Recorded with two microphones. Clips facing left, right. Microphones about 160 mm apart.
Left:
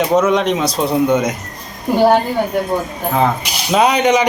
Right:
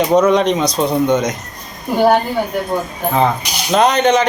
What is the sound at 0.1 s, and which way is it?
Speech, 5° left (ahead or behind).